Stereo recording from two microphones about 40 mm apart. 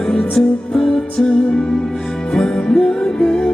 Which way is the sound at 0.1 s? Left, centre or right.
Centre.